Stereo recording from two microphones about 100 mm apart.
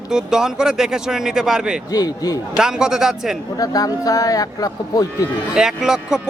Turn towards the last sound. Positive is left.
turn(degrees=-5)  # may be behind; listen again after turning